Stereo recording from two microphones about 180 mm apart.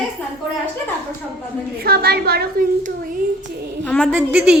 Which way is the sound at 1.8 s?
60° right (ahead or behind).